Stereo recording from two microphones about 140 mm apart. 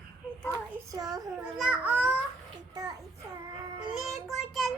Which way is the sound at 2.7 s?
25° right (ahead or behind).